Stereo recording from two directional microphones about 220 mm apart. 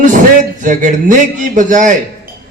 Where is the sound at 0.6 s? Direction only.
35° right (ahead or behind).